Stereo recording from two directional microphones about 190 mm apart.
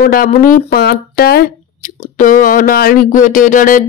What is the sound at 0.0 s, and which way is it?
Speech, 45° left (ahead or behind).